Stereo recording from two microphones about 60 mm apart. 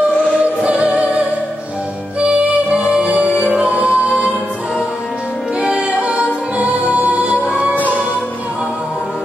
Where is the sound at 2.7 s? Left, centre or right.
Centre.